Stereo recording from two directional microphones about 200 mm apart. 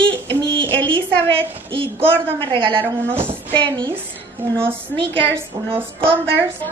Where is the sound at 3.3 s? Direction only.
25° right (ahead or behind).